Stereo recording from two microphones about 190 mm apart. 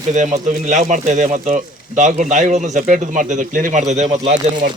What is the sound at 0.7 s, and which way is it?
Speech, 40° right (ahead or behind).